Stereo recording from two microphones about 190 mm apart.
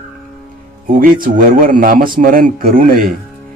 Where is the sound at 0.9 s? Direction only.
45° right (ahead or behind).